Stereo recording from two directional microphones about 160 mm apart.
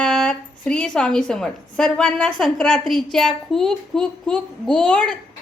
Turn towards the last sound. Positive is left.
turn(degrees=5)  # may be behind; listen again after turning